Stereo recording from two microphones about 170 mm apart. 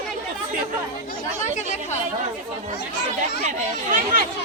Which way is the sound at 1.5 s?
45° left (ahead or behind).